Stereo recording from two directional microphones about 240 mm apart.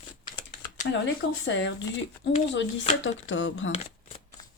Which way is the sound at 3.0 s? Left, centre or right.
Left.